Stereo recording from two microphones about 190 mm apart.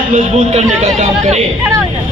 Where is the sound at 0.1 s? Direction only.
40° right (ahead or behind).